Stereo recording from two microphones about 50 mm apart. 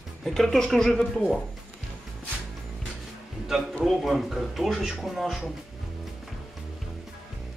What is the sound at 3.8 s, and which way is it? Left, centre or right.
Speech, centre.